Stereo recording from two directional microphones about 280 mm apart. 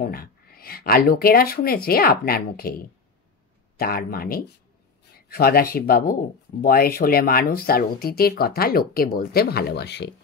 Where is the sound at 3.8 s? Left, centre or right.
Left.